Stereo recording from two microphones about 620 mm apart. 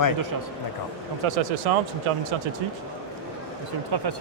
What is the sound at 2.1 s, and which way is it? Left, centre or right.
Speech, right.